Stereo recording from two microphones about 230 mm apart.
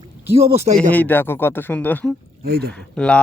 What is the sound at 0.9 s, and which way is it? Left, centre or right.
Speech, centre.